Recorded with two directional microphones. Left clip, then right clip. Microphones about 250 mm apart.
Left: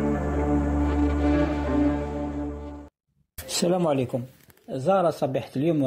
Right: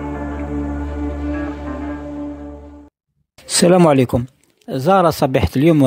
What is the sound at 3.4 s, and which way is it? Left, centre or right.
Speech, right.